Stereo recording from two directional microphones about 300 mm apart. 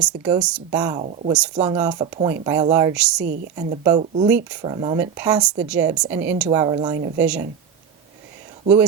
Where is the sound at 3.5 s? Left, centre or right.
Right.